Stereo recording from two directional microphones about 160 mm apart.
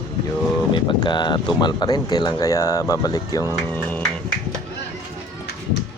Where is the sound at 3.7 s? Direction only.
10° left (ahead or behind).